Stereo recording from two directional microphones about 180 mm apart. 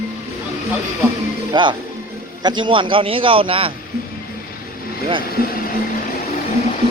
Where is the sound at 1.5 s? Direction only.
25° right (ahead or behind).